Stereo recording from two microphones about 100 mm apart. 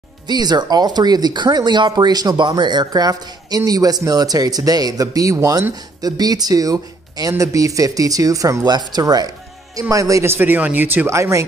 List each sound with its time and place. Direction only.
0.3 s speech: 45° right (ahead or behind)